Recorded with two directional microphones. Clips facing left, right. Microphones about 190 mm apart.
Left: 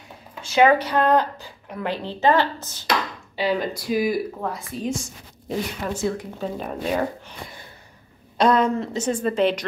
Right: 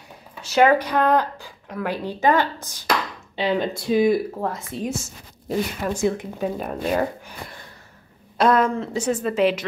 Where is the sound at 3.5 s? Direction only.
25° right (ahead or behind).